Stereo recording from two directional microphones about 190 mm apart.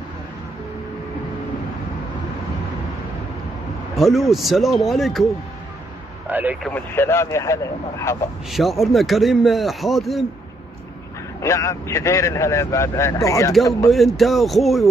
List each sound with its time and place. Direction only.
3.9 s a man's voice: centre (ahead or behind)
6.2 s a man's voice: 10° right (ahead or behind)
6.6 s speech: 10° left (ahead or behind)
8.5 s a man's voice: centre (ahead or behind)
11.4 s speech: 15° left (ahead or behind)
13.8 s a man's voice: centre (ahead or behind)